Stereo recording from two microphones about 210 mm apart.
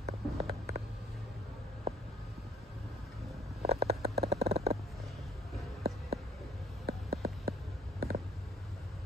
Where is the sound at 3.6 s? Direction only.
30° right (ahead or behind).